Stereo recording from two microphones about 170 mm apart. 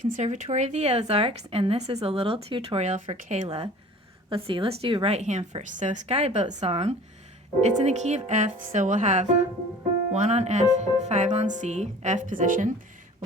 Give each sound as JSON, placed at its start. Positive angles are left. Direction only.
{"t": 0.0, "sound": "a woman's voice", "side_deg": -45}